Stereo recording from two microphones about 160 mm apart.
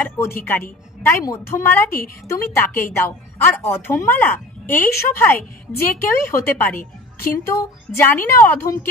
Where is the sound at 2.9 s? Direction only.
15° left (ahead or behind).